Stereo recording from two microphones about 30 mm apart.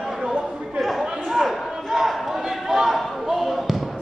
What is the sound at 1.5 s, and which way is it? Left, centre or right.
Crowd, centre.